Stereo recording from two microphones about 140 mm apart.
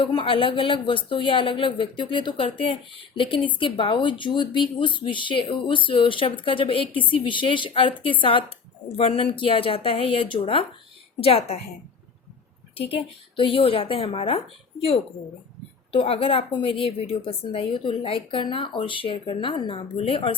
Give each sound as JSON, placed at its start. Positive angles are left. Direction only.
{"t": 0.0, "sound": "a woman's voice", "side_deg": 35}
{"t": 12.7, "sound": "a woman's voice", "side_deg": 40}